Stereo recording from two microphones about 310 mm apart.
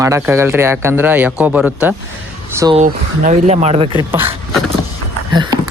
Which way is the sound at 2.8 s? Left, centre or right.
Right.